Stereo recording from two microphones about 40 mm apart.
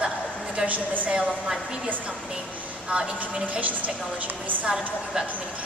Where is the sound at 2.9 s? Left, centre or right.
Right.